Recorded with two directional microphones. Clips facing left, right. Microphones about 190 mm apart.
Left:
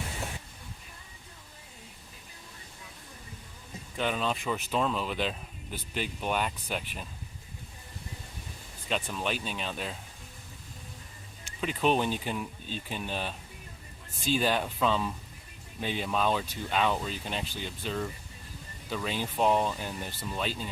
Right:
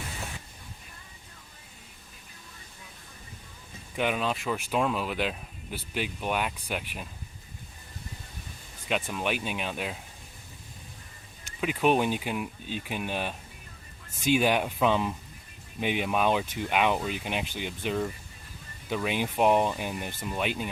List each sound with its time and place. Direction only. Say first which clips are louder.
3.9 s speech: right 2 dB; 10° right (ahead or behind)
9.0 s speech: right 3 dB; 10° right (ahead or behind)
11.6 s speech: right 3 dB; 10° right (ahead or behind)